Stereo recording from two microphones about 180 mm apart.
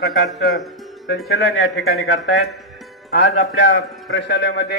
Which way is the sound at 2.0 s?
80° left.